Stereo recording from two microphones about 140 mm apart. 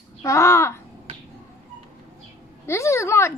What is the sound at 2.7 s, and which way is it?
Speech, 20° left (ahead or behind).